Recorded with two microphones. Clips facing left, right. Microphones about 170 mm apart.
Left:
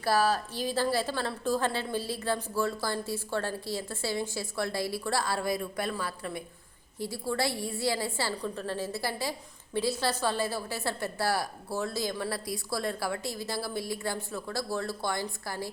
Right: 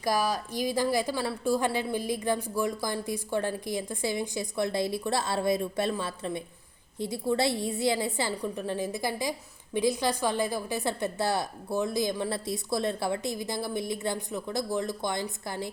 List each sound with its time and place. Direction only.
0.0 s a woman's voice: 15° right (ahead or behind)